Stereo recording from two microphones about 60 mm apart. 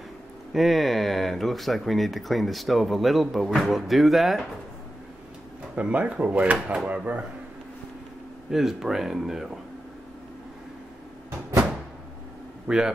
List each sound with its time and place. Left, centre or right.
0.5 s speech: centre
5.8 s speech: right
8.5 s speech: centre
12.6 s speech: centre